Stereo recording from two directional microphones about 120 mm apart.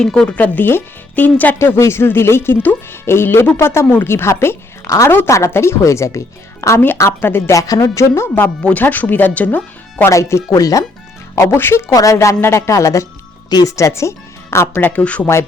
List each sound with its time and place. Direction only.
0.0 s speech: 5° left (ahead or behind)
10.1 s speech: 25° left (ahead or behind)